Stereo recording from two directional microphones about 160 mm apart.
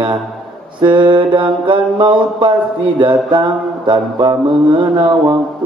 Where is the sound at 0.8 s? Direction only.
30° right (ahead or behind).